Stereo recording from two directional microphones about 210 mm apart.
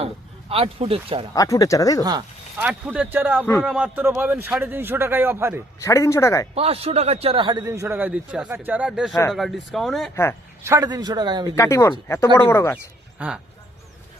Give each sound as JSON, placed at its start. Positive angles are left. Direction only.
{"t": 0.0, "sound": "speech", "side_deg": -25}
{"t": 1.3, "sound": "speech", "side_deg": 15}
{"t": 2.0, "sound": "speech", "side_deg": -20}
{"t": 2.6, "sound": "a man's voice", "side_deg": -5}
{"t": 5.8, "sound": "speech", "side_deg": 15}
{"t": 6.5, "sound": "a man's voice", "side_deg": -30}
{"t": 10.6, "sound": "a man's voice", "side_deg": -15}
{"t": 11.5, "sound": "speech", "side_deg": 15}
{"t": 13.1, "sound": "speech", "side_deg": -5}